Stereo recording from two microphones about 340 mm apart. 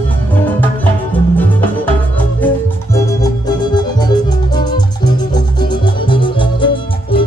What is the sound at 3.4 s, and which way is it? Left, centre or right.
Music, centre.